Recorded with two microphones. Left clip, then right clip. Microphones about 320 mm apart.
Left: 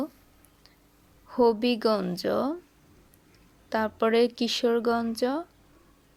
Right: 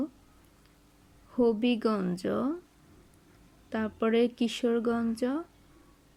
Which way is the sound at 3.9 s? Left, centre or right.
Centre.